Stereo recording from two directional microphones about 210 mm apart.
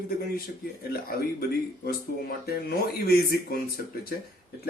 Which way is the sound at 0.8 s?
45° left (ahead or behind).